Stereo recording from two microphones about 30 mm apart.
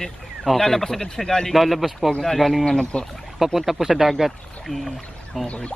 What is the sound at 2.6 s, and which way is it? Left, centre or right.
Speech, left.